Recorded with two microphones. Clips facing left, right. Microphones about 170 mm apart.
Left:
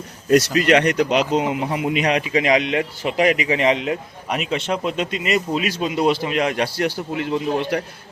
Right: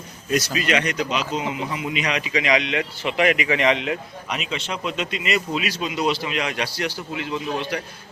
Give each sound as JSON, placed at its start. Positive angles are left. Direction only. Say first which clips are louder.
{"t": 0.6, "sound": "speech", "louder": "left 7 dB", "side_deg": 60}